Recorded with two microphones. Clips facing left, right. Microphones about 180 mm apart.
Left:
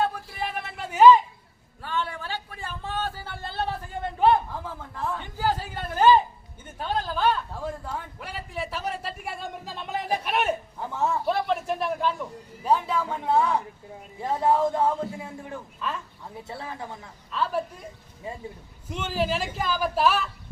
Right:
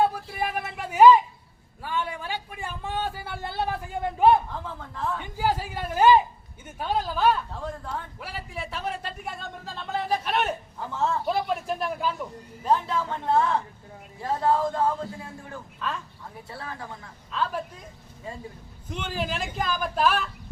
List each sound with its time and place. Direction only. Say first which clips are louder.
0.0 s a sound: right 3 dB; 10° right (ahead or behind)
4.5 s a man's voice: even; 5° left (ahead or behind)
5.2 s a woman's voice: right 1 dB; 10° right (ahead or behind)
7.5 s a sound: left 1 dB; 10° left (ahead or behind)
8.2 s a man's voice: left 2 dB; centre (ahead or behind); by 11.2 s 15° left (ahead or behind)
11.3 s a sound: left 1 dB; 5° right (ahead or behind)
12.6 s a man's voice: left 1 dB; 10° left (ahead or behind)
15.8 s speech: even; centre (ahead or behind)
16.4 s a man's voice: left 2 dB; 20° left (ahead or behind)
17.3 s speech: left 1 dB; 5° left (ahead or behind)
18.9 s speech: left 4 dB; 5° left (ahead or behind)